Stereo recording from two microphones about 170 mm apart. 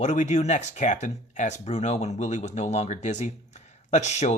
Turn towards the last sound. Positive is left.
turn(degrees=40)  # may be behind; listen again after turning